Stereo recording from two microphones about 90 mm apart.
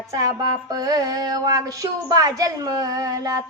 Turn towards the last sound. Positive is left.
turn(degrees=-40)  # may be behind; listen again after turning